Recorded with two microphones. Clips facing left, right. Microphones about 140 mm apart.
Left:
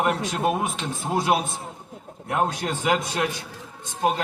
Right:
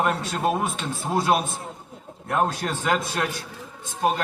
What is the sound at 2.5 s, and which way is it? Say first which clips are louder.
Speech: left 1 dB; 15° left (ahead or behind).